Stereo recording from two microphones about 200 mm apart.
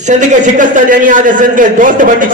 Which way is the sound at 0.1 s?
40° right (ahead or behind).